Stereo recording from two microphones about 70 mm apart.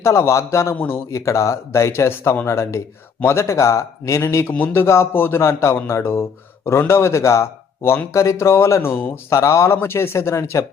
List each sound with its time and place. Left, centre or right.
0.0 s speech: left
2.5 s speech: left
9.3 s speech: left